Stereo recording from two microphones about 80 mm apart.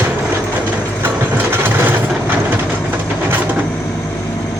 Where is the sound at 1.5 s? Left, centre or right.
Right.